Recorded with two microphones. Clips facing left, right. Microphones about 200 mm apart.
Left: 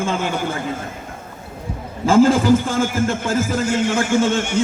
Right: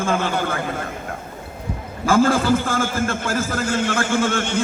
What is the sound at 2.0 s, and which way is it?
A man's voice, 20° left (ahead or behind).